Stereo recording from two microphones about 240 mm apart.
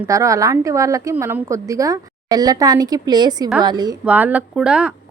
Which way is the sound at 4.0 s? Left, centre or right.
Centre.